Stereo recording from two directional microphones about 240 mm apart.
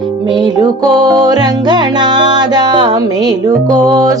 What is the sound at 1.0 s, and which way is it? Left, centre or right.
Music, centre.